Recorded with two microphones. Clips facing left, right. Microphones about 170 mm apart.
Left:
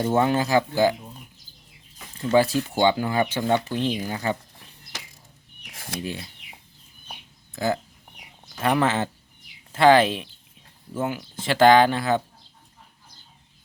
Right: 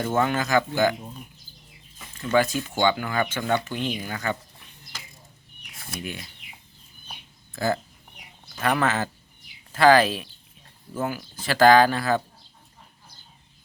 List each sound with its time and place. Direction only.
0.3 s speech: 30° left (ahead or behind)
2.1 s speech: 30° left (ahead or behind)
6.0 s speech: 30° left (ahead or behind)
7.5 s speech: 20° left (ahead or behind)